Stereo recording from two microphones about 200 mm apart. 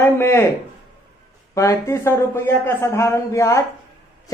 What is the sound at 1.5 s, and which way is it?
A man's voice, 15° left (ahead or behind).